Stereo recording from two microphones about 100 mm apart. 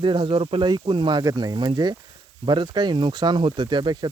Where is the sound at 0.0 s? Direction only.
55° right (ahead or behind).